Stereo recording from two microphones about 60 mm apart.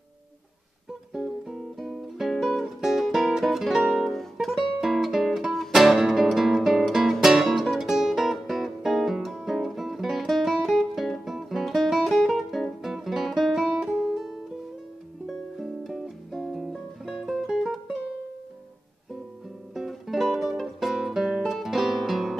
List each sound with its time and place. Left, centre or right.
1.1 s music: centre
19.7 s music: centre